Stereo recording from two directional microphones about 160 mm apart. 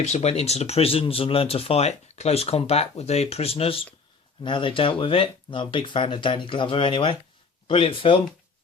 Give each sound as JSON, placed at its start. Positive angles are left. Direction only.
{"t": 0.0, "sound": "speech", "side_deg": 45}